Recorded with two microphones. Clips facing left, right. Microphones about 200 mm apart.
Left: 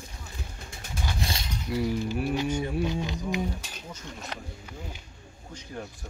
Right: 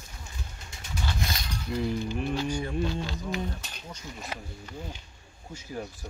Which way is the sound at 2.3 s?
20° left (ahead or behind).